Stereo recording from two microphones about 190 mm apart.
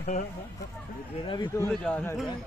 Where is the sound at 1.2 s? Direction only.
20° left (ahead or behind).